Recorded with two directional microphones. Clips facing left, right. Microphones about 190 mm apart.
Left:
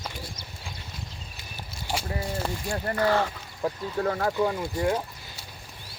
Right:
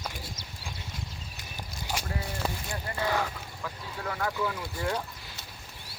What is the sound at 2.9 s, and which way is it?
Speech, 5° right (ahead or behind).